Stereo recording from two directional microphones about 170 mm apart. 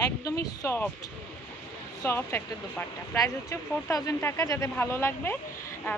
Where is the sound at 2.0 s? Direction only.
15° left (ahead or behind).